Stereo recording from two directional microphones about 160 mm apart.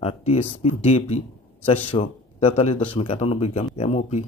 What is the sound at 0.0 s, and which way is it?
A man's voice, 40° left (ahead or behind).